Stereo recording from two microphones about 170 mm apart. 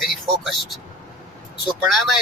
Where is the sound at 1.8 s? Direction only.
Centre (ahead or behind).